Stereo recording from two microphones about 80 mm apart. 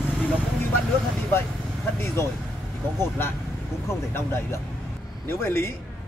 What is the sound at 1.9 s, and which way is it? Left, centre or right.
Speech, left.